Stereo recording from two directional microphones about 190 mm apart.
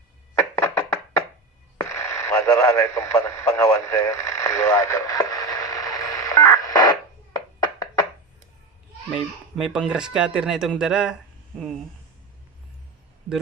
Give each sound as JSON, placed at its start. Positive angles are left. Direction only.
{"t": 0.6, "sound": "knock", "side_deg": 15}
{"t": 1.8, "sound": "radio", "side_deg": 15}
{"t": 7.3, "sound": "music", "side_deg": 20}
{"t": 9.0, "sound": "speech", "side_deg": -5}